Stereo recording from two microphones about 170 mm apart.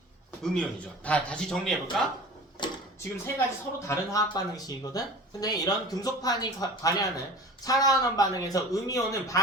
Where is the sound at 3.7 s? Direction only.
15° left (ahead or behind).